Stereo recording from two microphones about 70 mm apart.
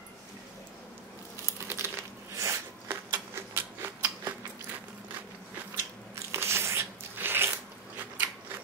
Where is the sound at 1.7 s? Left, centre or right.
Right.